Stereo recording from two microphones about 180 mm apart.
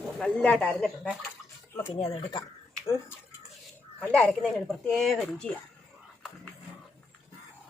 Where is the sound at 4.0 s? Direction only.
5° left (ahead or behind).